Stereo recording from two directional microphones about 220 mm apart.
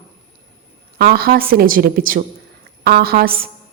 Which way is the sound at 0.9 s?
45° right (ahead or behind).